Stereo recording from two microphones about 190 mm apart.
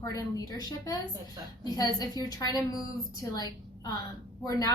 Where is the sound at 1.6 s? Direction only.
20° left (ahead or behind).